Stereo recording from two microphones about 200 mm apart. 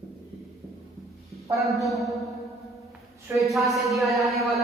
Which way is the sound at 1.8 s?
Centre (ahead or behind).